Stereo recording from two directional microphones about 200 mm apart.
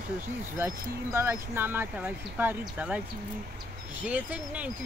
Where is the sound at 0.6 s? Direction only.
15° right (ahead or behind).